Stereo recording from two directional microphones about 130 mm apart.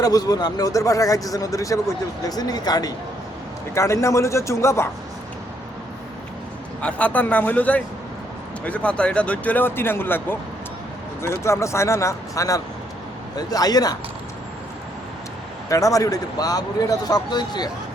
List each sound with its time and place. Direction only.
0.0 s speech: 30° left (ahead or behind)
6.8 s speech: 10° left (ahead or behind); by 13.9 s 30° left (ahead or behind)
15.7 s speech: 25° left (ahead or behind)